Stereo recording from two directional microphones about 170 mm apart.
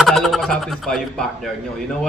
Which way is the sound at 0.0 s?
Centre (ahead or behind).